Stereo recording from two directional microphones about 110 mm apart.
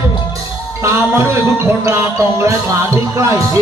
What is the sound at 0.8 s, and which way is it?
Music, 25° right (ahead or behind).